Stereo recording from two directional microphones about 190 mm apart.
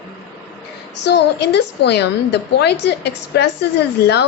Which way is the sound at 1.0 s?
60° left (ahead or behind).